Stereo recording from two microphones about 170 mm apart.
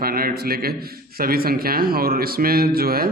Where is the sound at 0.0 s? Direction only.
60° right (ahead or behind).